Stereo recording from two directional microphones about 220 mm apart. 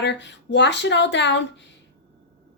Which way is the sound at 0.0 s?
50° left (ahead or behind).